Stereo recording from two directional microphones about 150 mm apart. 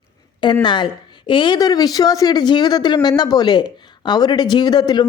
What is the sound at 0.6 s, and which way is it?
A woman's voice, 30° left (ahead or behind).